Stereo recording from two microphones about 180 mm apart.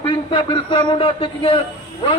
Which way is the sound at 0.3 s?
25° left (ahead or behind).